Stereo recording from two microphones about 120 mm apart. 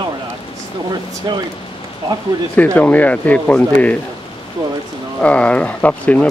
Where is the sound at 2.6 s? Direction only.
10° left (ahead or behind).